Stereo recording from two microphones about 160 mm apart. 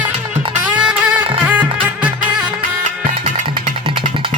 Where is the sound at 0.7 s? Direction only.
5° right (ahead or behind).